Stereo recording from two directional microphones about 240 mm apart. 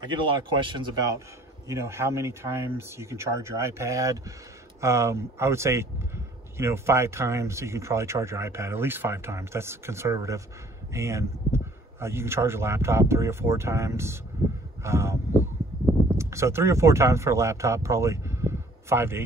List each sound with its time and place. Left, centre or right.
0.0 s speech: centre
14.8 s a sound: centre
16.2 s speech: centre